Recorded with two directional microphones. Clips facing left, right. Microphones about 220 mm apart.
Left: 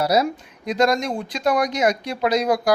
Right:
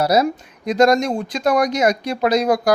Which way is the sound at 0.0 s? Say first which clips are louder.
Right 3 dB; 45° right (ahead or behind).